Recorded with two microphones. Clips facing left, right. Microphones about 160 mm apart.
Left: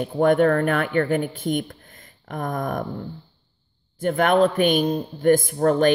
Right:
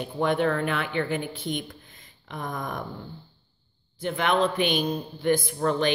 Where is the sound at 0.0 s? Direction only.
50° left (ahead or behind).